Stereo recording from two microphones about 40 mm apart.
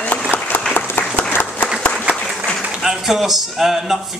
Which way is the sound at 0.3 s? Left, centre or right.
Left.